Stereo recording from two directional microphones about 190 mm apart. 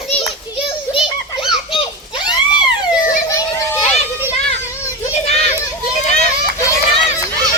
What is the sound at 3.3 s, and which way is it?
Children playing, 15° left (ahead or behind).